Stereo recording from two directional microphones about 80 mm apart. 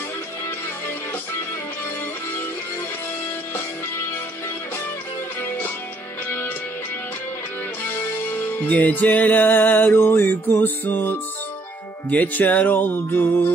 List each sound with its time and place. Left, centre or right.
7.8 s music: left
8.5 s music: centre